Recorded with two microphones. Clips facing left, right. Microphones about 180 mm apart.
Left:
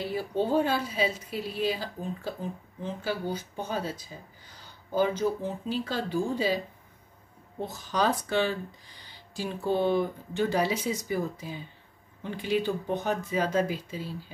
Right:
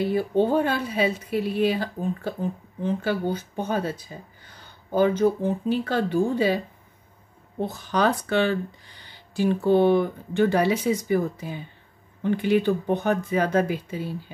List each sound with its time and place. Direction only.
0.0 s speech: 55° right (ahead or behind)
7.6 s speech: 65° right (ahead or behind)